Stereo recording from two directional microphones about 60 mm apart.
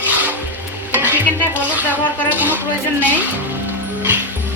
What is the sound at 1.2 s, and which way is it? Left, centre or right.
Music, left.